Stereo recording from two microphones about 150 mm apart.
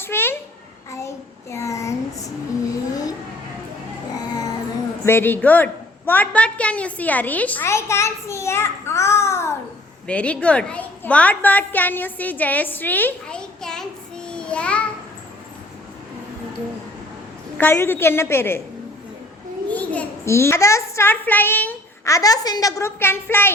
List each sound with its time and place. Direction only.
0.0 s a sound: 15° left (ahead or behind)
0.9 s child singing: 20° left (ahead or behind)
2.9 s vehicle: 25° left (ahead or behind)
4.3 s a sound: 25° left (ahead or behind)
5.0 s a woman's voice: 15° left (ahead or behind)
17.6 s a woman's voice: 15° left (ahead or behind)
19.7 s a child's voice: 10° left (ahead or behind)